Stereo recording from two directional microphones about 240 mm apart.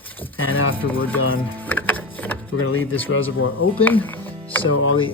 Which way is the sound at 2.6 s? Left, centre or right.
Left.